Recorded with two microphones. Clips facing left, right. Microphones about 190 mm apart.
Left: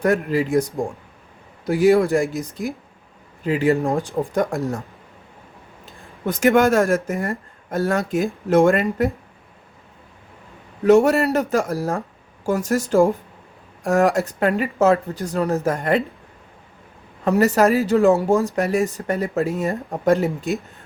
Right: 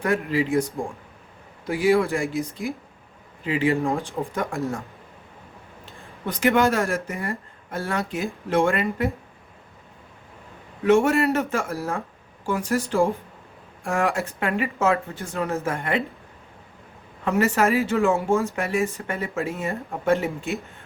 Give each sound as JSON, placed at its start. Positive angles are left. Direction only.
{"t": 0.0, "sound": "speech", "side_deg": 45}
{"t": 1.6, "sound": "speech", "side_deg": 45}
{"t": 3.4, "sound": "speech", "side_deg": 45}
{"t": 5.8, "sound": "speech", "side_deg": 45}
{"t": 10.8, "sound": "speech", "side_deg": 40}
{"t": 17.2, "sound": "speech", "side_deg": 40}